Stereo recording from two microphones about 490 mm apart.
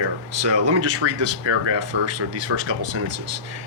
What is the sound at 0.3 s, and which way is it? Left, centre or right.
Speech, right.